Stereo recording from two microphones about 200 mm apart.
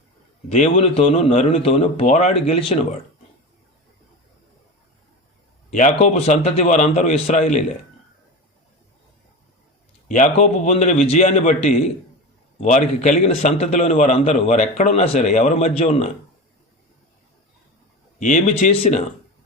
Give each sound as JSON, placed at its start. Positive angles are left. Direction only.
{"t": 0.4, "sound": "a man's voice", "side_deg": 35}
{"t": 5.7, "sound": "a man's voice", "side_deg": 35}
{"t": 10.1, "sound": "a man's voice", "side_deg": 35}
{"t": 18.2, "sound": "a man's voice", "side_deg": 40}
{"t": 18.5, "sound": "a man's voice", "side_deg": 30}